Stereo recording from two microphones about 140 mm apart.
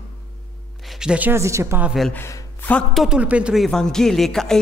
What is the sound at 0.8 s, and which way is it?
A woman's voice, centre (ahead or behind).